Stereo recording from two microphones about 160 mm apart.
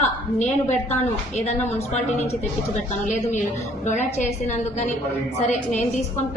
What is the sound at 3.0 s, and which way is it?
A woman's voice, 50° left (ahead or behind).